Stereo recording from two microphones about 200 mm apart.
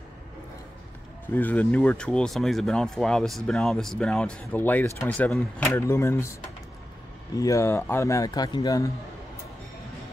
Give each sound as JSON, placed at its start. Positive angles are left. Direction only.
{"t": 1.3, "sound": "speech", "side_deg": 10}
{"t": 7.3, "sound": "a man's voice", "side_deg": 15}